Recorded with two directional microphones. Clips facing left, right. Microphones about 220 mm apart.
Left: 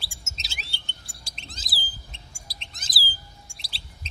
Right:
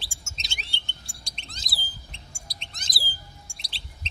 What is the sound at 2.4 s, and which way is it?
Chirp, 5° left (ahead or behind).